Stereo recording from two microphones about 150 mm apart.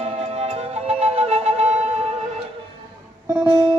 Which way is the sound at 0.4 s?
45° right (ahead or behind).